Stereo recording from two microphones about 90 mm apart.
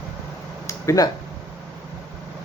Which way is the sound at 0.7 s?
35° left (ahead or behind).